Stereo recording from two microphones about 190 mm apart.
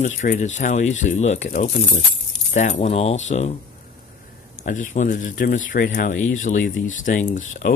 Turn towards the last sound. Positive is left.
turn(degrees=45)  # may be behind; listen again after turning